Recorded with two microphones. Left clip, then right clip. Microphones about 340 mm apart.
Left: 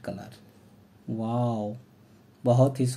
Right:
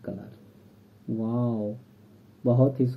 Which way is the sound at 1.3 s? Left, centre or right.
Centre.